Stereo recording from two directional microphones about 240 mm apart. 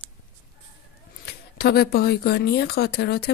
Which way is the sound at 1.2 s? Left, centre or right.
Left.